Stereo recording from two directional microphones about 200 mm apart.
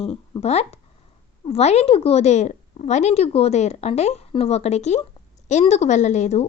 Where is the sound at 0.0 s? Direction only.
30° left (ahead or behind).